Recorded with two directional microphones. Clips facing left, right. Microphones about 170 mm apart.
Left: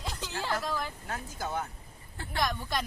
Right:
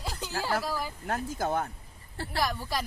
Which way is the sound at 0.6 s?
10° right (ahead or behind).